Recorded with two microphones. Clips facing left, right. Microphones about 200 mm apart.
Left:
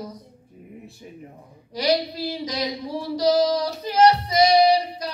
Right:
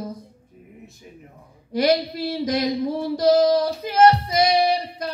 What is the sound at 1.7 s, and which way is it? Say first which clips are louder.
Music: right 3 dB; 50° right (ahead or behind).